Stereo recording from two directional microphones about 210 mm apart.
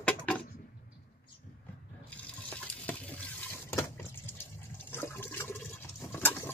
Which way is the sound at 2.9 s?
10° left (ahead or behind).